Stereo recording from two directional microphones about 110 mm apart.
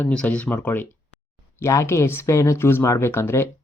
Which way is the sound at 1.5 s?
25° left (ahead or behind).